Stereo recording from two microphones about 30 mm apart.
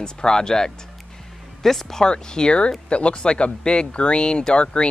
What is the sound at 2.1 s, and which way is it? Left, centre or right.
Speech, left.